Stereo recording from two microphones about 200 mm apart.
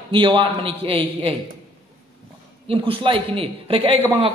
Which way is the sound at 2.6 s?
25° right (ahead or behind).